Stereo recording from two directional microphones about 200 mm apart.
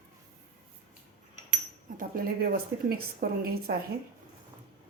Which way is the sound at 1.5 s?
45° right (ahead or behind).